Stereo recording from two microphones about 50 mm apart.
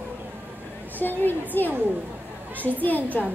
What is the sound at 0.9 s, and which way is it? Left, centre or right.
Speech, left.